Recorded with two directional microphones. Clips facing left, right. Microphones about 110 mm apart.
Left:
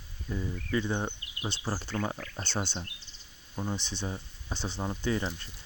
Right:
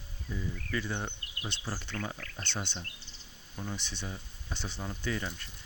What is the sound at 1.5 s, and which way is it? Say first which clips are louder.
Speech: left 5 dB; 35° left (ahead or behind).